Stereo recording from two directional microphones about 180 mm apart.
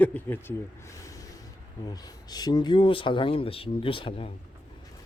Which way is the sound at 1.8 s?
20° left (ahead or behind).